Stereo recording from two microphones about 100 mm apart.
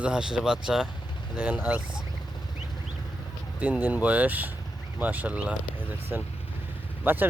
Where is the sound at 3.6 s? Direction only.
20° right (ahead or behind).